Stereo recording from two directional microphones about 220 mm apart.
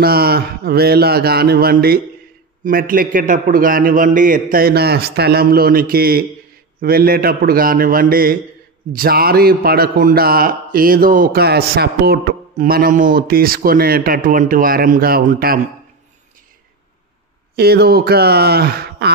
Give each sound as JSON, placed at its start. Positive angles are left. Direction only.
{"t": 0.0, "sound": "a man's voice", "side_deg": -45}
{"t": 17.6, "sound": "a man's voice", "side_deg": -45}